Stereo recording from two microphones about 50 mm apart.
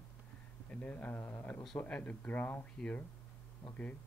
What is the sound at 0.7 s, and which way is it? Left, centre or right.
Speech, left.